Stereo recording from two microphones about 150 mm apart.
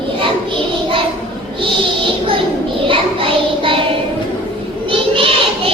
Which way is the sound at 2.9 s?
35° right (ahead or behind).